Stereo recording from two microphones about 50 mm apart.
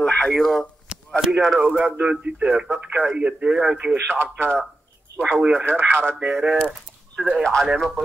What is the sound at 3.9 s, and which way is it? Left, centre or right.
Speech, right.